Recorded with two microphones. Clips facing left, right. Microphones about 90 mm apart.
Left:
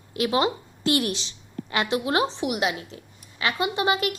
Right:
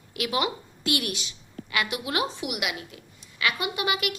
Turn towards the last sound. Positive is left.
turn(degrees=35)  # may be behind; listen again after turning